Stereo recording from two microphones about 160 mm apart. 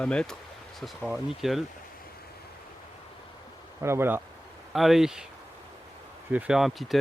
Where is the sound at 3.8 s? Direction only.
15° right (ahead or behind).